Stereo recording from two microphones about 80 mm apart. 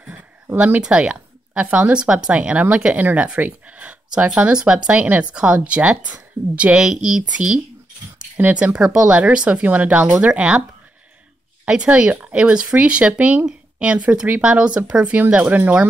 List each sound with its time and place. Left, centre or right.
0.6 s speech: centre
11.6 s speech: centre